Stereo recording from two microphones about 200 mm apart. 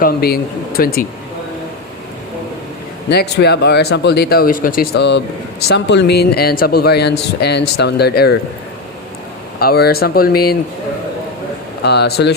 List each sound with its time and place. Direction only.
0.0 s speech: 50° left (ahead or behind)
3.1 s speech: 55° left (ahead or behind)
9.6 s speech: 50° left (ahead or behind)
11.8 s speech: 55° left (ahead or behind)